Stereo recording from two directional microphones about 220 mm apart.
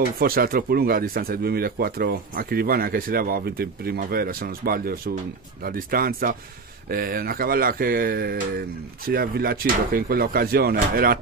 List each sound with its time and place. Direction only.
0.2 s speech: 40° right (ahead or behind)